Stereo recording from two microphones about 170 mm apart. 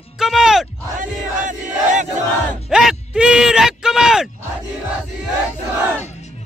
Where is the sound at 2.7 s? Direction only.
5° right (ahead or behind).